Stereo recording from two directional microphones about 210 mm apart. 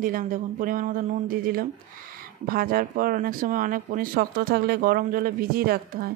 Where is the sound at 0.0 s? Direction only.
40° right (ahead or behind).